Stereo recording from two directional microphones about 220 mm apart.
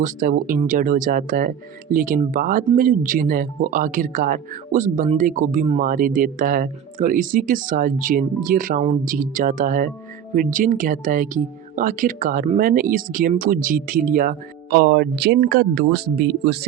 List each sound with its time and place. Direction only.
0.0 s speech: 40° right (ahead or behind)